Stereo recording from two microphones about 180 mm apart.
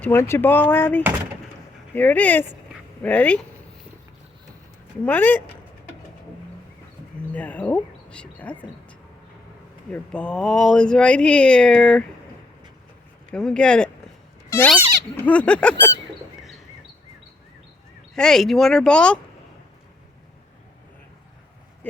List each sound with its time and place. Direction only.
0.0 s speech: 15° left (ahead or behind)
5.0 s speech: 10° left (ahead or behind)
7.2 s speech: 10° left (ahead or behind)
9.9 s speech: 5° left (ahead or behind)
13.3 s speech: 5° left (ahead or behind)
14.5 s goat: 15° left (ahead or behind)
15.2 s speech: 5° left (ahead or behind)
18.1 s speech: centre (ahead or behind)